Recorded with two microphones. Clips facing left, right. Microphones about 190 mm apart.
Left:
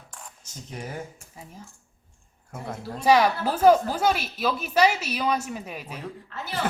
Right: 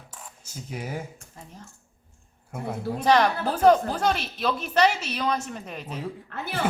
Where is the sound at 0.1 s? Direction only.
5° right (ahead or behind).